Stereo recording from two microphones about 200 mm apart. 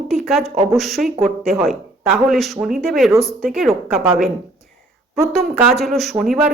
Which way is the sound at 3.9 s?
35° right (ahead or behind).